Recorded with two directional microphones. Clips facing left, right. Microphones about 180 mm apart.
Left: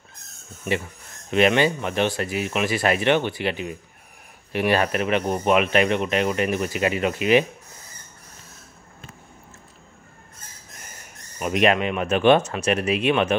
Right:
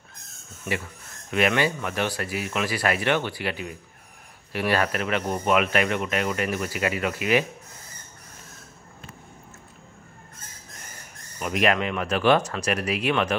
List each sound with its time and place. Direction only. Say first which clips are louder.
1.3 s speech: left 4 dB; 25° left (ahead or behind)
11.3 s speech: left 3 dB; 20° left (ahead or behind)